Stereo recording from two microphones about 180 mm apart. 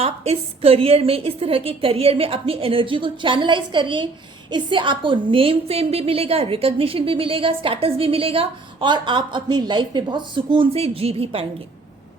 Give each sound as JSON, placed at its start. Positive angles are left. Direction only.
{"t": 0.0, "sound": "a woman's voice", "side_deg": -35}